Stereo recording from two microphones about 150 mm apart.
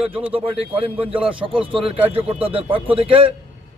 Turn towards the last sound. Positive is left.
turn(degrees=-35)  # may be behind; listen again after turning